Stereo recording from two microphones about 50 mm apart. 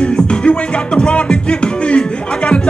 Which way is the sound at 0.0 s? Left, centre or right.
Centre.